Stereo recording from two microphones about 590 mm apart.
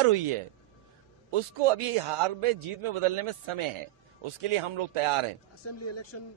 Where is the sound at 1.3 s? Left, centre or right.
Right.